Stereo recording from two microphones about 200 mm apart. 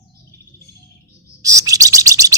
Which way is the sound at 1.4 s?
15° right (ahead or behind).